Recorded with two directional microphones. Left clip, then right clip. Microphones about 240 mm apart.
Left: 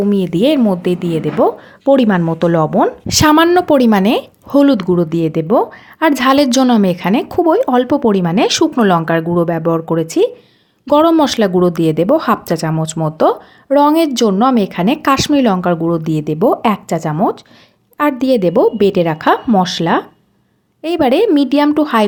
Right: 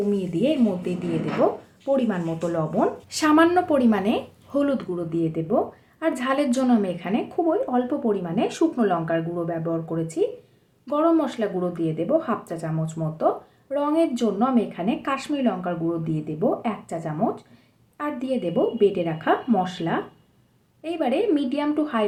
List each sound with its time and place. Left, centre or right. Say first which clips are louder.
0.1 s speech: left 10 dB; left